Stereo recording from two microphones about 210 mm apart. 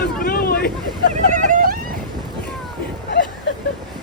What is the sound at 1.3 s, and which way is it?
Vehicle, 40° right (ahead or behind).